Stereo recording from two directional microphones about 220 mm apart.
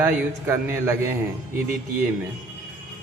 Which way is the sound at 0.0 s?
10° right (ahead or behind).